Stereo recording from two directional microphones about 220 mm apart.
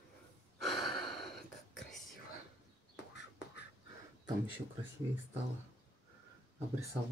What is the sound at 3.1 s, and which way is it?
Duck, 50° left (ahead or behind).